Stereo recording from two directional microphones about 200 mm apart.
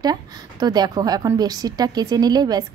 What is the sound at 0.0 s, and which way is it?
A woman's voice, 20° right (ahead or behind).